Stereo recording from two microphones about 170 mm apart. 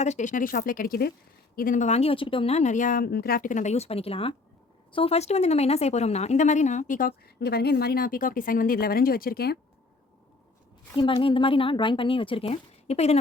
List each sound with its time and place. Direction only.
0.0 s speech: 45° left (ahead or behind); by 9.6 s 65° left (ahead or behind)
10.9 s speech: 30° left (ahead or behind)